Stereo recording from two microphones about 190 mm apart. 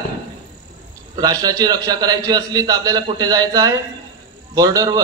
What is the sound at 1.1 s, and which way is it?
A man's voice, 20° right (ahead or behind).